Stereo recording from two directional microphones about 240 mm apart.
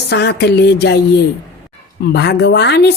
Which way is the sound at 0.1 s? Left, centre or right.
Left.